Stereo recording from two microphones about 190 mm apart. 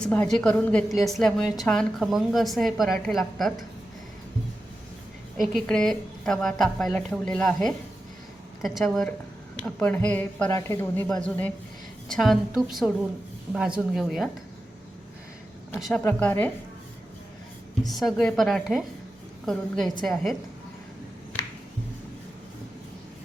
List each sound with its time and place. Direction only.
0.0 s a woman's voice: 5° left (ahead or behind)
5.4 s a woman's voice: centre (ahead or behind)
16.0 s speech: 10° left (ahead or behind)
17.8 s a woman's voice: centre (ahead or behind)